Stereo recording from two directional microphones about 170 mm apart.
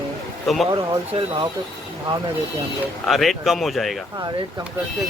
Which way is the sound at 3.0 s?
Centre (ahead or behind).